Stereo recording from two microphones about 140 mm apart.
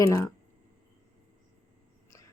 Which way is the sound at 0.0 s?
20° left (ahead or behind).